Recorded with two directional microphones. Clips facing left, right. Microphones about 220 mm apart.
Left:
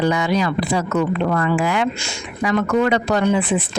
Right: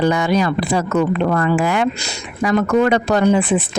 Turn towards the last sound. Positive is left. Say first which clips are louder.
# right 3 dB
turn(degrees=-45)  # may be behind; listen again after turning